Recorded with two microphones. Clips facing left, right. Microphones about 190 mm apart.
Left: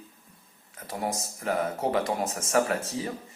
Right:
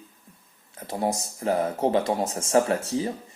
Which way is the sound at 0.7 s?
30° right (ahead or behind).